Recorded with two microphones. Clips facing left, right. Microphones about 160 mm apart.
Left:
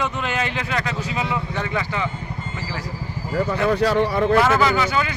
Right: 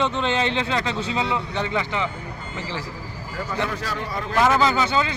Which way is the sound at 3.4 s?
65° left (ahead or behind).